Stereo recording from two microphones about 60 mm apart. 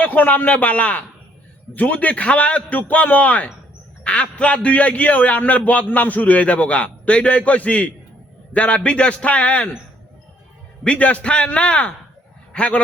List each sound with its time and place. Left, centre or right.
0.0 s a man's voice: left
10.8 s a man's voice: left